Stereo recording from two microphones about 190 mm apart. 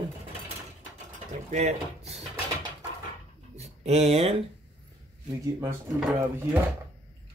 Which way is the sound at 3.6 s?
35° right (ahead or behind).